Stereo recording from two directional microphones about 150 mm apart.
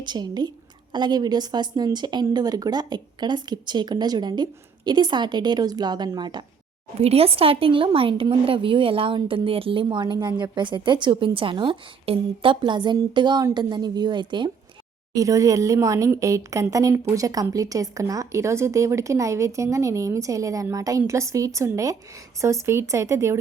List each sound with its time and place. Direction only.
0.0 s speech: 30° right (ahead or behind)
7.0 s a woman's voice: 40° right (ahead or behind); by 23.4 s 20° right (ahead or behind)